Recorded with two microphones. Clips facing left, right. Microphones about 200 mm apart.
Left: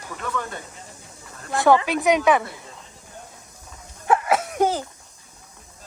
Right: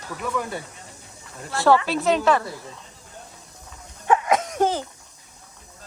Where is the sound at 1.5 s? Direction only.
15° left (ahead or behind).